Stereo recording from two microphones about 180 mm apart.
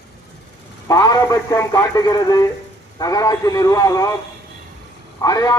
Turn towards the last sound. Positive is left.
turn(degrees=20)  # may be behind; listen again after turning